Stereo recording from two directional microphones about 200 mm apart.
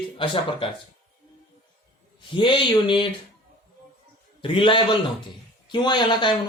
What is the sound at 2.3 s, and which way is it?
Speech, 25° left (ahead or behind).